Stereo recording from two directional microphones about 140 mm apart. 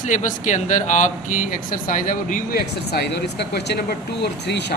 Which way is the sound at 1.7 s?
70° left (ahead or behind).